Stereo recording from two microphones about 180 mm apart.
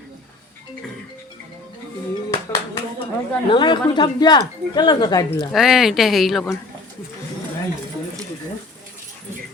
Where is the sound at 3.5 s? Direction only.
25° left (ahead or behind).